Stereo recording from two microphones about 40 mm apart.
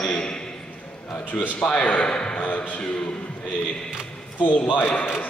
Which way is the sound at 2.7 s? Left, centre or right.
Left.